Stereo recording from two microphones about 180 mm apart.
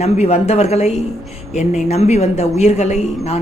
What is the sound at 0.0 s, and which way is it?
Speech, 35° left (ahead or behind).